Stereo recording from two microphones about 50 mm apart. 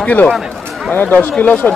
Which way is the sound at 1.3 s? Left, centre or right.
Left.